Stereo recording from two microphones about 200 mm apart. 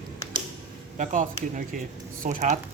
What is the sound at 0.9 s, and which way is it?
Speech, 40° right (ahead or behind).